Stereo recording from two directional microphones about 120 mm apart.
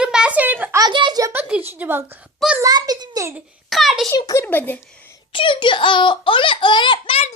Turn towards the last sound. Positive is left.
turn(degrees=45)  # may be behind; listen again after turning